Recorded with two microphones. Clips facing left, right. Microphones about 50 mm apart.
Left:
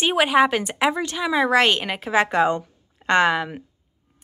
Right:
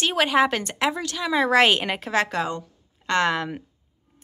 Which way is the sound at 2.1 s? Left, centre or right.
Centre.